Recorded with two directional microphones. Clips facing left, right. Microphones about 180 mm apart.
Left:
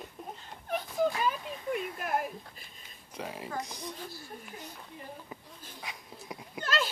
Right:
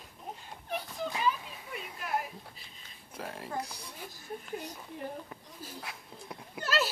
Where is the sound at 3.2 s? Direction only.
Centre (ahead or behind).